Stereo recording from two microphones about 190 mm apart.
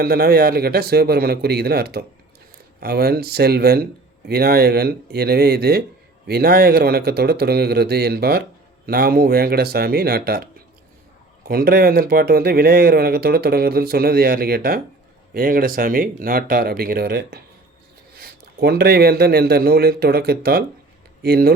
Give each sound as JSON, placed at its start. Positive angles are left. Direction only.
{"t": 0.0, "sound": "a man's voice", "side_deg": -50}